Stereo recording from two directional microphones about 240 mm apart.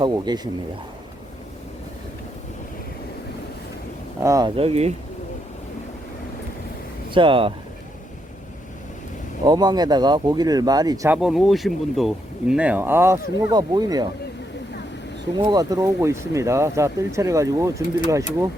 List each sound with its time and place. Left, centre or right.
0.0 s speech: centre
4.2 s speech: centre
7.1 s speech: right
9.4 s speech: centre
11.2 s speech: centre
15.4 s speech: centre